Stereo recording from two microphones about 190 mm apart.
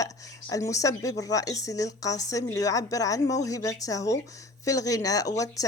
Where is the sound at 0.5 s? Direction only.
15° left (ahead or behind).